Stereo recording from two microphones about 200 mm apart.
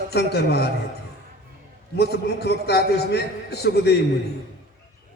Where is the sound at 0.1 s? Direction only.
55° left (ahead or behind).